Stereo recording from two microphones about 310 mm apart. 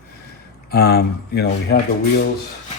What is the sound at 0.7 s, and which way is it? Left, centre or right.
Speech, left.